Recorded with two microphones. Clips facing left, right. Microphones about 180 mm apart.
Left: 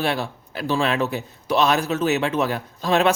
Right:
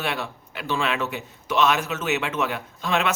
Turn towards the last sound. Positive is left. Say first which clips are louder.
# left 5 dB
turn(degrees=35)  # may be behind; listen again after turning